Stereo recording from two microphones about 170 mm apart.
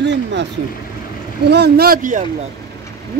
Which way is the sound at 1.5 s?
70° right (ahead or behind).